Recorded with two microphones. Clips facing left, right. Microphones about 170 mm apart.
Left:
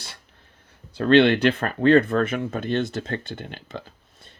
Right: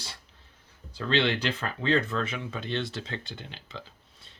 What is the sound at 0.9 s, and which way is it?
Speech, 60° left (ahead or behind).